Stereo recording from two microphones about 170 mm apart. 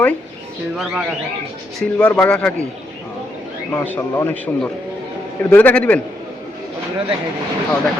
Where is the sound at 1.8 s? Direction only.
5° left (ahead or behind).